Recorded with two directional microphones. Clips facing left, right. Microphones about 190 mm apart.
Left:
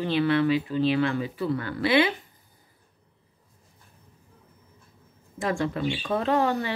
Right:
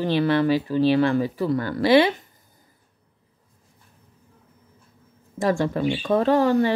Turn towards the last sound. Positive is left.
turn(degrees=-40)  # may be behind; listen again after turning